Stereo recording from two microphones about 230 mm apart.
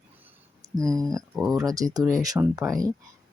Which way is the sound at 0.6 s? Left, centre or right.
Centre.